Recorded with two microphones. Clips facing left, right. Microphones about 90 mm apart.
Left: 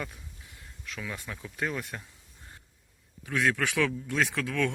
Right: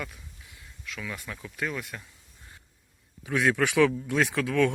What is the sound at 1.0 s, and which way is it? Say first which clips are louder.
Speech: right 1 dB; 20° left (ahead or behind).